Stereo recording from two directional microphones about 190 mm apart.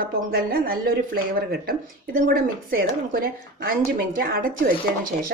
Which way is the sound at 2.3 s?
50° right (ahead or behind).